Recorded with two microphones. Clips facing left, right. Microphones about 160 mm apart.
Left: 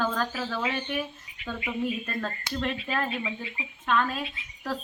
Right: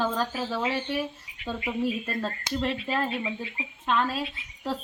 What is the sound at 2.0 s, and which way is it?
Speech, 25° right (ahead or behind).